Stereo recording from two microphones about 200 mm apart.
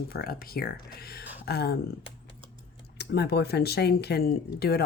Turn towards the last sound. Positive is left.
turn(degrees=50)  # may be behind; listen again after turning